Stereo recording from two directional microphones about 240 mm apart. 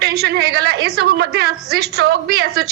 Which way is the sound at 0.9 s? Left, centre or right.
Right.